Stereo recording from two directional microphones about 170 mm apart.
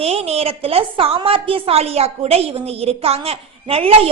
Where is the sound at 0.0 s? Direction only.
35° right (ahead or behind).